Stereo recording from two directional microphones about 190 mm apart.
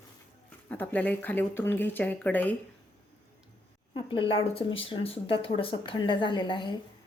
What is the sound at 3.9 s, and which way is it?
A woman's voice, 25° left (ahead or behind).